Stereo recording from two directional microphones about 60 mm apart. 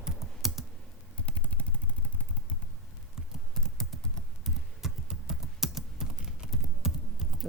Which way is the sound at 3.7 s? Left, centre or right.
Centre.